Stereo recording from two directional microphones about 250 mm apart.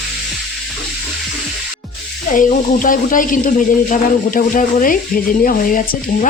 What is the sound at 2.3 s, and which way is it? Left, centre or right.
Speech, left.